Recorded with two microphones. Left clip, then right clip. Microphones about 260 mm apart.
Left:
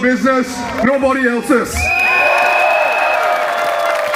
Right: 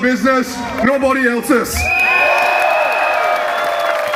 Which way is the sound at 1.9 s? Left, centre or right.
Centre.